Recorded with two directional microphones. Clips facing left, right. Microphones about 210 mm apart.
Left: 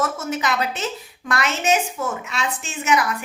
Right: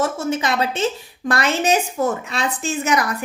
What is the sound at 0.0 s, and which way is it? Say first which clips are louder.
A woman's voice: right 3 dB; 25° right (ahead or behind).